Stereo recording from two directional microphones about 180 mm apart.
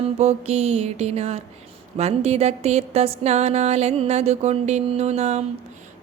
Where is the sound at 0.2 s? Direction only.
35° right (ahead or behind).